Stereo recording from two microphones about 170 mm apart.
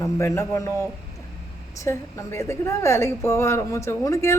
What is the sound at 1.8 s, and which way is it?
A woman's voice, 15° left (ahead or behind).